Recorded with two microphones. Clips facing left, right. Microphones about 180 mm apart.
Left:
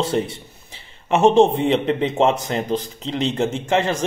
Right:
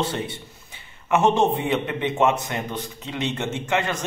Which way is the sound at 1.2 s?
25° left (ahead or behind).